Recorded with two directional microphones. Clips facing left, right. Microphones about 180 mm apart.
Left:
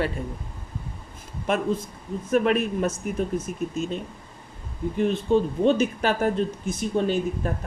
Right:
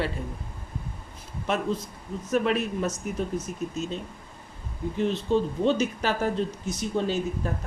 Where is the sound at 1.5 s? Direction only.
50° left (ahead or behind).